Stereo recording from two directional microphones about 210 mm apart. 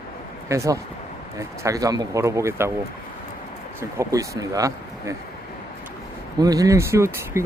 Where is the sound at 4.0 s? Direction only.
15° right (ahead or behind).